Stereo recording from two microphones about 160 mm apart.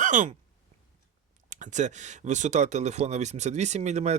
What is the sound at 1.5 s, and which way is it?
Speech, 50° right (ahead or behind).